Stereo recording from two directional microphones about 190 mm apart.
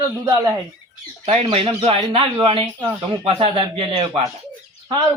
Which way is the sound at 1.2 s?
35° right (ahead or behind).